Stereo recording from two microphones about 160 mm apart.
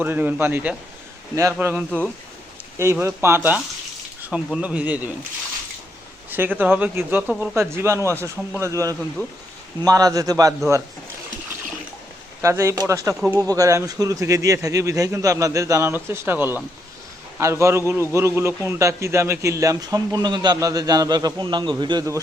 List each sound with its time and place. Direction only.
0.0 s speech: 10° right (ahead or behind)
6.3 s speech: 10° right (ahead or behind)
9.2 s speech: 15° left (ahead or behind)
9.8 s a man's voice: 20° right (ahead or behind)
12.4 s a man's voice: 20° right (ahead or behind)
13.1 s speech: 5° right (ahead or behind)
13.4 s a man's voice: 20° right (ahead or behind)